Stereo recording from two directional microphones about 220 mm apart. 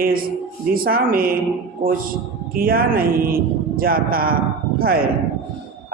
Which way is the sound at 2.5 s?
40° right (ahead or behind).